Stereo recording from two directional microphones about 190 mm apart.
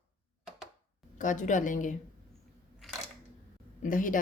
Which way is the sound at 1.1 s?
40° left (ahead or behind).